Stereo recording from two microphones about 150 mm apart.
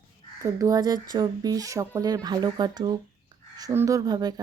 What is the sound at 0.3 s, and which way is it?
Speech, 20° right (ahead or behind).